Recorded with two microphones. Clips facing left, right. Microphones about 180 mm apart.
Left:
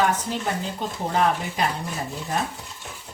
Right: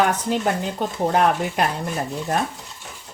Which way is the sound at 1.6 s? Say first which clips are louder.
Right 2 dB; 60° right (ahead or behind).